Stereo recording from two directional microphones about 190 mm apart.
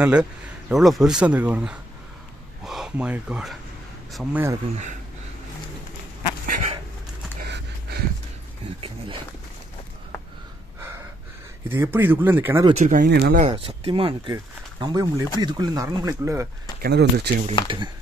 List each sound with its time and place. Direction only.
0.0 s speech: 5° right (ahead or behind)
6.4 s dog: 45° right (ahead or behind)
7.4 s a sound: 60° right (ahead or behind)
8.8 s a sound: 25° right (ahead or behind)
11.7 s speech: 10° right (ahead or behind)
12.7 s speech: 40° right (ahead or behind)
13.0 s speech: 60° right (ahead or behind)
13.4 s speech: 30° right (ahead or behind)
16.8 s speech: 60° right (ahead or behind)
17.6 s speech: 25° right (ahead or behind)